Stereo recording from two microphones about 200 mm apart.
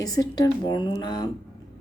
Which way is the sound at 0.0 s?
20° left (ahead or behind).